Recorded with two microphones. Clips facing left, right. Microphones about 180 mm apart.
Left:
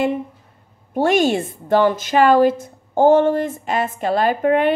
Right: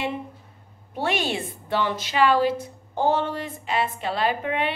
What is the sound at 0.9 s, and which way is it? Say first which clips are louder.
A woman's voice: left 10 dB; 45° left (ahead or behind).